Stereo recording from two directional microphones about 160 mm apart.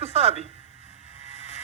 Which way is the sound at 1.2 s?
45° right (ahead or behind).